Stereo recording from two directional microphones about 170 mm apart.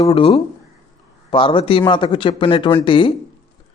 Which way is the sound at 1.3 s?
30° left (ahead or behind).